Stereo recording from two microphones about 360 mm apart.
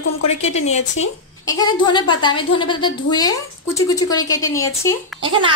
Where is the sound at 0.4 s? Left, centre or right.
Centre.